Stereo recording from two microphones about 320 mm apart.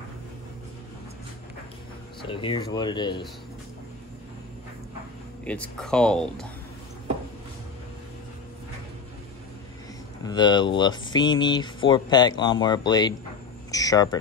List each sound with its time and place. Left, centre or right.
2.3 s speech: centre
5.4 s speech: centre
10.2 s speech: centre
13.7 s a sound: centre